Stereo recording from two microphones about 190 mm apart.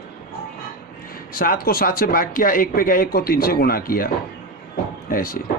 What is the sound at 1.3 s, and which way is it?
Speech, 50° left (ahead or behind).